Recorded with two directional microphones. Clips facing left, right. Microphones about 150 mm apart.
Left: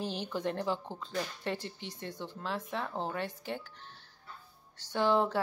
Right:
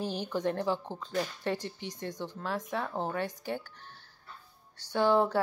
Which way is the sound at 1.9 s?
40° right (ahead or behind).